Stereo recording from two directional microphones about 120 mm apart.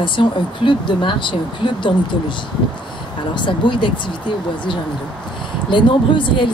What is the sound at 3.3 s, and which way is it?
Speech, 40° left (ahead or behind).